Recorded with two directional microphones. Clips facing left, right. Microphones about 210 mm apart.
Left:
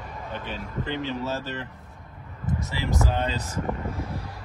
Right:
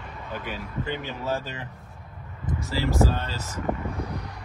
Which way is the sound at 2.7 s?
20° left (ahead or behind).